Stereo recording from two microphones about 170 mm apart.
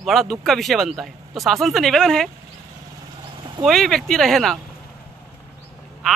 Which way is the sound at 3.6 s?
Centre (ahead or behind).